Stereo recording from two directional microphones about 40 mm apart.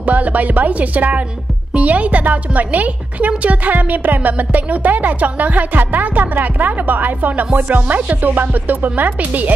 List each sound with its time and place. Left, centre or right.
0.0 s a woman's voice: right